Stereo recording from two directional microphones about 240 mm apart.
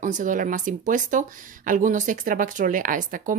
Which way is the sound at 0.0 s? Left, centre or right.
Right.